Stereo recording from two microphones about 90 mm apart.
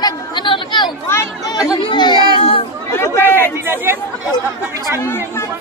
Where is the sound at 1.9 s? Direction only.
55° left (ahead or behind).